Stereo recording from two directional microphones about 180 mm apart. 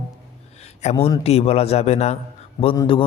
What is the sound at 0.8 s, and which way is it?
A man's voice, 40° left (ahead or behind).